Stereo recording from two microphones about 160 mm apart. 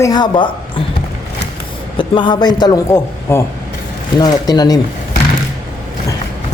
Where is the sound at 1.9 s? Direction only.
30° left (ahead or behind).